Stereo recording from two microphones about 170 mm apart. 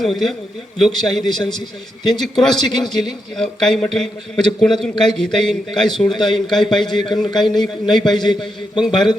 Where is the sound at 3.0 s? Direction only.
Centre (ahead or behind).